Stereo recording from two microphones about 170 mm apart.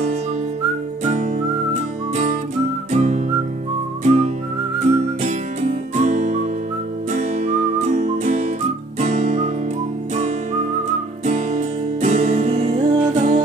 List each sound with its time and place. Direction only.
1.0 s music: 40° right (ahead or behind)
2.9 s whistling: 45° right (ahead or behind)
4.8 s music: 45° right (ahead or behind)
9.0 s guitar: 45° right (ahead or behind)
10.1 s music: 40° right (ahead or behind)